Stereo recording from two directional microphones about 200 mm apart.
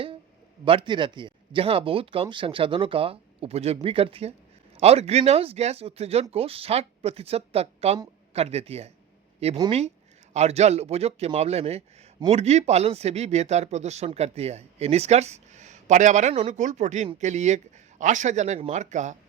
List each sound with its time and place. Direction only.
0.6 s speech: 25° right (ahead or behind)